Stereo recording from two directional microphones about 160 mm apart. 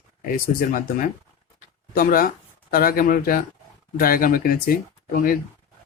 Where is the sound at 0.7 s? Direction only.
60° left (ahead or behind).